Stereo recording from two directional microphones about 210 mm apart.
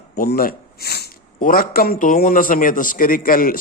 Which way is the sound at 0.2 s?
45° left (ahead or behind).